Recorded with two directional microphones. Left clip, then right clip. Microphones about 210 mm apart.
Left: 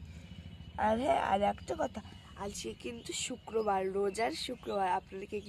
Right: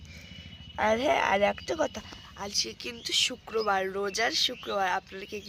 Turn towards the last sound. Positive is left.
turn(degrees=0)  # may be behind; listen again after turning